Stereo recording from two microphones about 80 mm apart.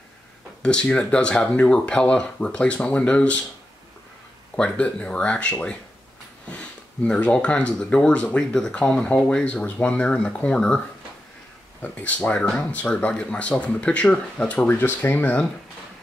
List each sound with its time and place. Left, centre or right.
0.6 s speech: centre
4.6 s speech: centre
11.8 s speech: centre